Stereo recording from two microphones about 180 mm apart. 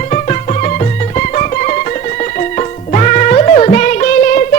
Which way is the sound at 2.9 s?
40° left (ahead or behind).